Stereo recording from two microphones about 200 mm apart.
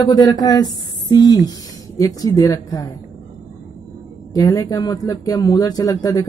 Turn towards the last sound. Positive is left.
turn(degrees=15)  # may be behind; listen again after turning